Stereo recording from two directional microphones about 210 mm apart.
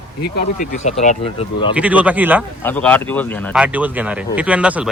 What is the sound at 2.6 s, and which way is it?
Speech, 10° left (ahead or behind).